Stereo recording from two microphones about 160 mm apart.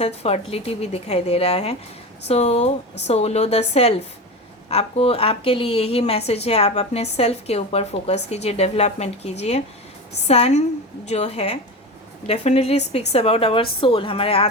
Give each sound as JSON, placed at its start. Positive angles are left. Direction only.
{"t": 0.0, "sound": "a woman's voice", "side_deg": 40}